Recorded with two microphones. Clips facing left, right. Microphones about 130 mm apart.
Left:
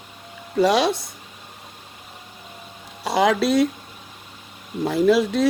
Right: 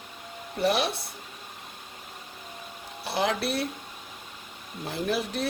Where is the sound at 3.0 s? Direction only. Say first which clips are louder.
Left 9 dB; 90° left.